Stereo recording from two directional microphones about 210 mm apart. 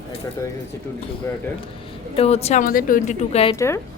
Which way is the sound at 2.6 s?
40° left (ahead or behind).